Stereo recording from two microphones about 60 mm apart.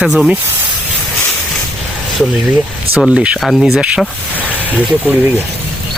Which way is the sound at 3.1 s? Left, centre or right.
Centre.